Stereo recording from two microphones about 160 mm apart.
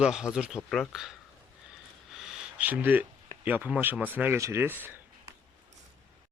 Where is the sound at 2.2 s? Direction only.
5° right (ahead or behind).